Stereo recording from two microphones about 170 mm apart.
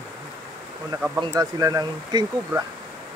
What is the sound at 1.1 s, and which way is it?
Speech, 20° right (ahead or behind).